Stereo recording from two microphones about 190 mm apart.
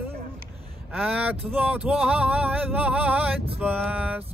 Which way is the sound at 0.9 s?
5° right (ahead or behind).